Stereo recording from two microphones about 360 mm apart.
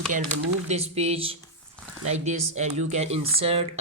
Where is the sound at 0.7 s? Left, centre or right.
Centre.